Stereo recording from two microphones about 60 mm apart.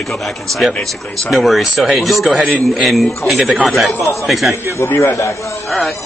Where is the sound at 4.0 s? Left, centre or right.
Left.